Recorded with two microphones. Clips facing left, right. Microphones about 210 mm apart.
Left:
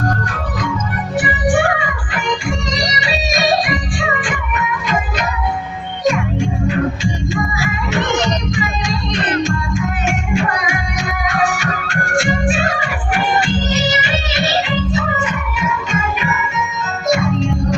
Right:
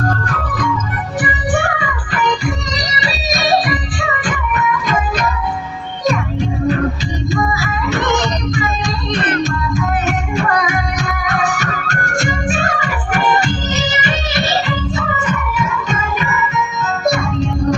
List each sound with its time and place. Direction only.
11.5 s music: 40° right (ahead or behind)
15.2 s music: 40° right (ahead or behind)